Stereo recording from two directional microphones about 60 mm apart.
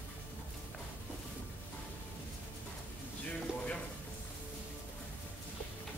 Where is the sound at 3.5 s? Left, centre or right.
Centre.